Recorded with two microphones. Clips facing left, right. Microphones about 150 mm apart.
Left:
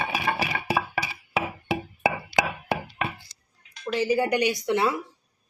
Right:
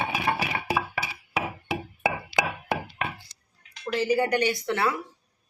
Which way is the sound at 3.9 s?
10° left (ahead or behind).